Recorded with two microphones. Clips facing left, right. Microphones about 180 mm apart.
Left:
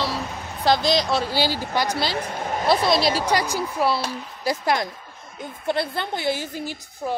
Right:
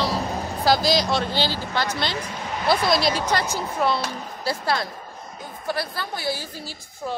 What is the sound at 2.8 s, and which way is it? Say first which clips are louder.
Speech: left 1 dB; centre (ahead or behind).